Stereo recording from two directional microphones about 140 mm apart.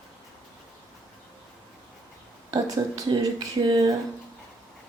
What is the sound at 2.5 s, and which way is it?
Speech, 25° right (ahead or behind).